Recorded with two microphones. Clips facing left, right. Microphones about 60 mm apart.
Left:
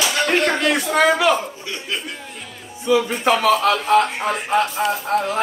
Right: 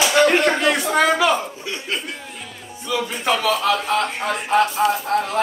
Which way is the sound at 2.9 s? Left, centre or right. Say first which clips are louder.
Left 3 dB; centre.